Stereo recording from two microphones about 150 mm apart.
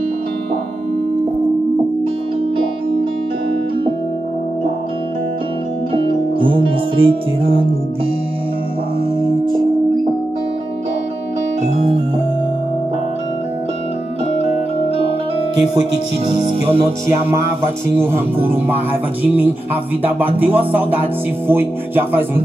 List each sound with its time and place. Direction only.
6.0 s music: 35° right (ahead or behind)
11.6 s music: 45° right (ahead or behind)
16.3 s music: 40° right (ahead or behind)
17.9 s speech: 15° right (ahead or behind)